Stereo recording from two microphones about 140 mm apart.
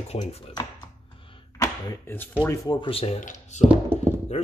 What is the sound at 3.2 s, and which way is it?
Speech, 55° left (ahead or behind).